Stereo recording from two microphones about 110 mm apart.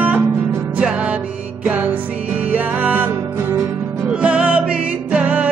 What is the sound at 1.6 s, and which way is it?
Music, 15° right (ahead or behind).